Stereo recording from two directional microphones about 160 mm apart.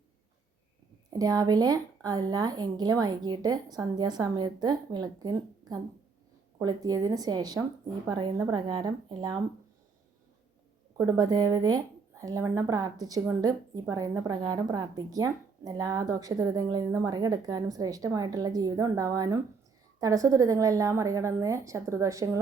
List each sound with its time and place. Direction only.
1.1 s speech: 25° right (ahead or behind)
10.9 s speech: 20° right (ahead or behind)